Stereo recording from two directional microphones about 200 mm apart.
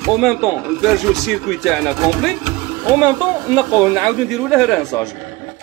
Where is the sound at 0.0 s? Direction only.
Centre (ahead or behind).